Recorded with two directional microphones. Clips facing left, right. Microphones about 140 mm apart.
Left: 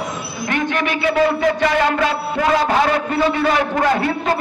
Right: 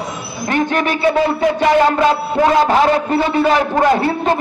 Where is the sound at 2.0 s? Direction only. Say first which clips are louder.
Right 5 dB; 35° right (ahead or behind).